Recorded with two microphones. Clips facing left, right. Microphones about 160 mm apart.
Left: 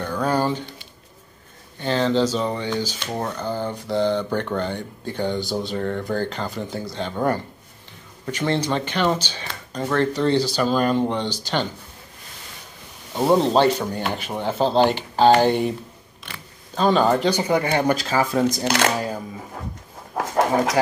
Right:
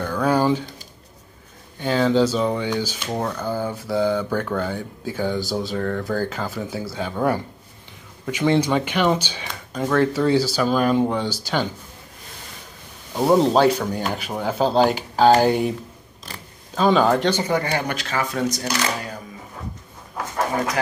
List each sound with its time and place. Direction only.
0.2 s a sound: 10° right (ahead or behind)
1.8 s speech: 10° right (ahead or behind)
8.3 s speech: 10° right (ahead or behind)
13.2 s speech: centre (ahead or behind)
16.7 s speech: centre (ahead or behind)
17.3 s speech: 15° left (ahead or behind)
17.6 s speech: 30° left (ahead or behind)
18.7 s speech: 65° left (ahead or behind)